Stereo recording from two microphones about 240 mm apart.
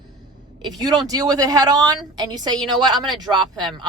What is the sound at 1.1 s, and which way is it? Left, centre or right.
A woman's voice, centre.